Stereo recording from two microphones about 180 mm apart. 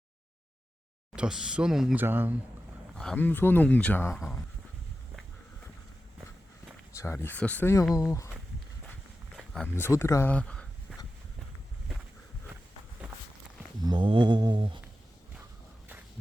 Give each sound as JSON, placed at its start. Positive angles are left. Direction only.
{"t": 1.1, "sound": "speech", "side_deg": -5}
{"t": 2.9, "sound": "speech", "side_deg": 5}
{"t": 4.1, "sound": "speech", "side_deg": 0}
{"t": 6.9, "sound": "speech", "side_deg": 15}
{"t": 9.4, "sound": "a sound", "side_deg": 0}
{"t": 9.8, "sound": "speech", "side_deg": 15}
{"t": 10.9, "sound": "a sound", "side_deg": -5}
{"t": 13.8, "sound": "mantra", "side_deg": -25}